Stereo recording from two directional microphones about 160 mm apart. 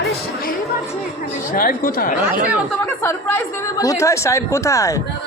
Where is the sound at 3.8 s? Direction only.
20° left (ahead or behind).